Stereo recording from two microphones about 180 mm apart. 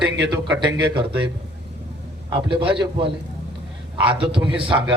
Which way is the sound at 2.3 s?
25° right (ahead or behind).